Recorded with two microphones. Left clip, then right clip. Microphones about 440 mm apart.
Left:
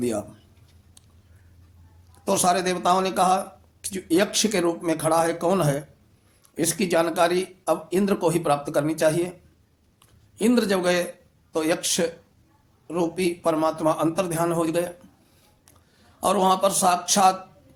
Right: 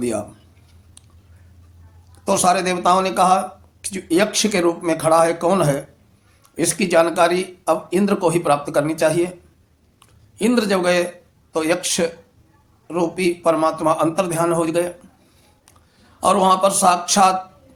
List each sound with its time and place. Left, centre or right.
0.0 s speech: left
2.2 s speech: left
10.0 s a sound: left
11.5 s a man's voice: left